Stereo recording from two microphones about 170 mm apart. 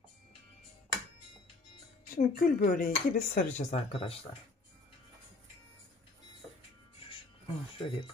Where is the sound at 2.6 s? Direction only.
50° left (ahead or behind).